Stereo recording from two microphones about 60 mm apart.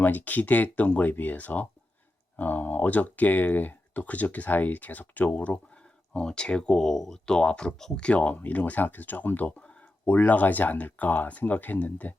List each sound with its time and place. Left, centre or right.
0.0 s speech: left
9.6 s a sound: centre
10.1 s speech: left